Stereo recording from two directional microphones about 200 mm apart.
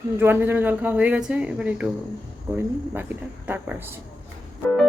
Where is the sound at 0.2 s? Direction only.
10° right (ahead or behind).